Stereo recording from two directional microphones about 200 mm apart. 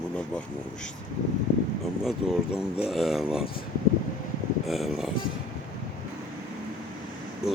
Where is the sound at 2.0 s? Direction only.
5° right (ahead or behind).